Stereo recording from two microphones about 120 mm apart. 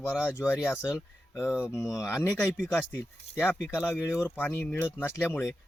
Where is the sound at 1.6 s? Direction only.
5° right (ahead or behind).